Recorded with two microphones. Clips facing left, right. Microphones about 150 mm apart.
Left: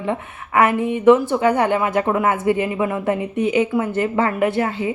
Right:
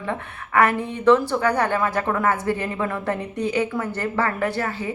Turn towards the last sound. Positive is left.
turn(degrees=20)  # may be behind; listen again after turning